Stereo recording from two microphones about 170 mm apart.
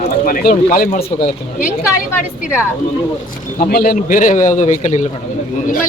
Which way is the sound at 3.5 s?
60° left (ahead or behind).